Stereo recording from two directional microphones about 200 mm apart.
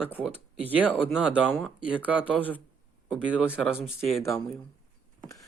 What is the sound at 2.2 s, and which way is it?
Speech, 10° left (ahead or behind).